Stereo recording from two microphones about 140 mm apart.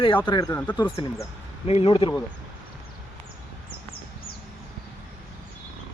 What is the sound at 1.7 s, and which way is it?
Speech, 45° left (ahead or behind).